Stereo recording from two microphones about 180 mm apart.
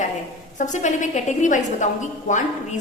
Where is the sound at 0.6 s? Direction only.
40° left (ahead or behind).